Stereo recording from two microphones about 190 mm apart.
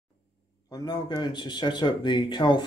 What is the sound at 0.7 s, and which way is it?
Speech, 20° left (ahead or behind).